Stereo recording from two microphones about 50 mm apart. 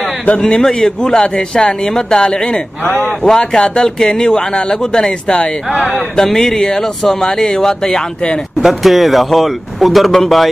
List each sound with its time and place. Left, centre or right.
0.0 s a sound: left
0.6 s a man's voice: centre
3.0 s speech: left
3.3 s a man's voice: centre
8.5 s speech: centre